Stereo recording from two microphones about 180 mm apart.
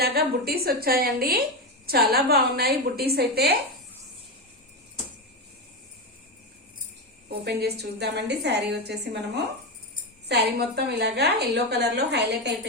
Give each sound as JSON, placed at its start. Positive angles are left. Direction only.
{"t": 0.0, "sound": "a woman's voice", "side_deg": -60}
{"t": 7.3, "sound": "a woman's voice", "side_deg": -65}